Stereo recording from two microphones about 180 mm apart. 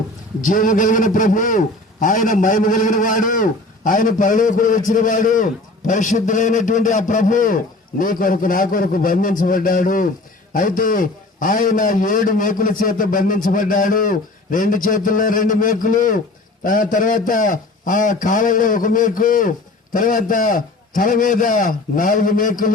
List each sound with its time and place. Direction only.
0.4 s a man's voice: 45° left (ahead or behind)